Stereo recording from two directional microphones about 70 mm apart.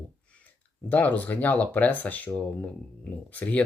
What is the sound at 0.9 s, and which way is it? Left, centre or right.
Speech, left.